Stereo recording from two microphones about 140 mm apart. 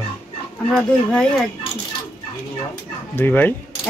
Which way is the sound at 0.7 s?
Centre (ahead or behind).